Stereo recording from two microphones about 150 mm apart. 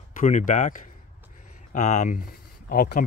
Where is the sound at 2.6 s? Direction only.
70° left (ahead or behind).